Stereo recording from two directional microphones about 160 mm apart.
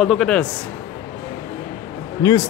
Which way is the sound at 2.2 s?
25° left (ahead or behind).